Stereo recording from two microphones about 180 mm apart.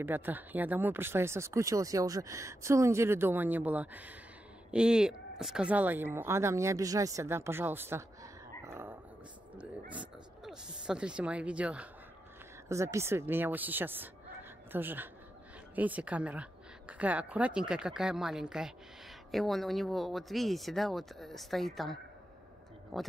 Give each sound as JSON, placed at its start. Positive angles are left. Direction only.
{"t": 0.0, "sound": "speech", "side_deg": -10}
{"t": 8.6, "sound": "dog", "side_deg": -15}
{"t": 9.6, "sound": "oink", "side_deg": -5}
{"t": 12.6, "sound": "speech", "side_deg": -15}